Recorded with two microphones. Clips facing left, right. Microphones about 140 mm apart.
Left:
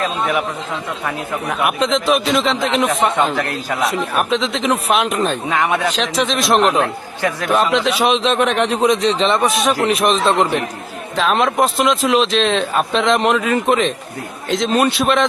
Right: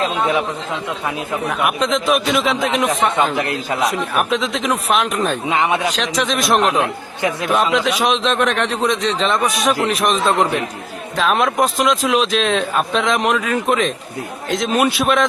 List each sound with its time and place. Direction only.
1.5 s a man's voice: centre (ahead or behind)
3.3 s speech: 20° right (ahead or behind)
3.8 s a man's voice: centre (ahead or behind)
5.5 s speech: 20° right (ahead or behind)
6.3 s a man's voice: centre (ahead or behind)
6.8 s speech: 20° right (ahead or behind)
7.5 s a man's voice: centre (ahead or behind)